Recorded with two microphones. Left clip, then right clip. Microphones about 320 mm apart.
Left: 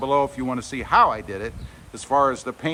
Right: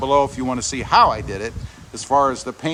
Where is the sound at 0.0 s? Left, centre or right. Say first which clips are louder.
Right 4 dB; centre.